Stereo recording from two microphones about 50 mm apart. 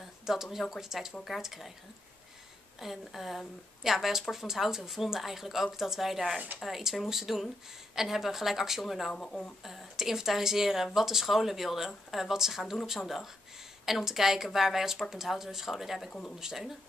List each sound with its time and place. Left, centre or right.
0.3 s a woman's voice: centre
2.8 s a woman's voice: centre
6.3 s speech: right
6.6 s a woman's voice: centre
9.1 s speech: centre
9.7 s a woman's voice: centre